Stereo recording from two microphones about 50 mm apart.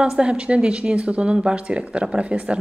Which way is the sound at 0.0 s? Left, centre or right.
Centre.